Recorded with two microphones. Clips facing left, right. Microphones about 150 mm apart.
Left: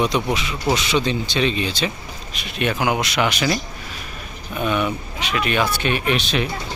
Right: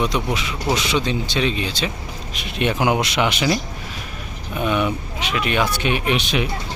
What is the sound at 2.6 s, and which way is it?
Speech, 25° right (ahead or behind).